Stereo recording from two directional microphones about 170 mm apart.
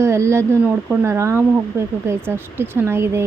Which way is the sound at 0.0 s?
15° right (ahead or behind).